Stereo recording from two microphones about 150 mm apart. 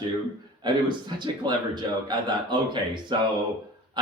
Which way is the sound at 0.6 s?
30° right (ahead or behind).